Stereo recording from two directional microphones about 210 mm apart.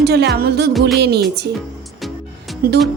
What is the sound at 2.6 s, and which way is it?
Speech, 50° right (ahead or behind).